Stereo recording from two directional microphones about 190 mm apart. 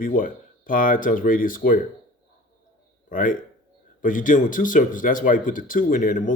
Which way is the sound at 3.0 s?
45° left (ahead or behind).